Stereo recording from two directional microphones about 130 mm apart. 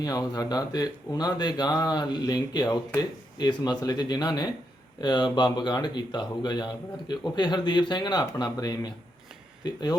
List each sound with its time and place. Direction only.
0.0 s speech: 30° left (ahead or behind)